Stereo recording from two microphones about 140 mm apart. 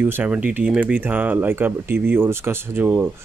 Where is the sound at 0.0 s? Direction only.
10° right (ahead or behind).